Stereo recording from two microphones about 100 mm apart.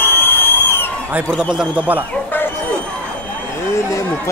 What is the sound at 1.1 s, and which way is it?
Speech, 15° right (ahead or behind).